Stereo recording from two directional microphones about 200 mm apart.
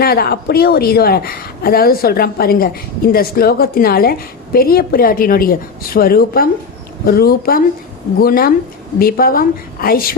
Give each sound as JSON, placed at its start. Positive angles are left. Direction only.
{"t": 0.0, "sound": "a woman's voice", "side_deg": 50}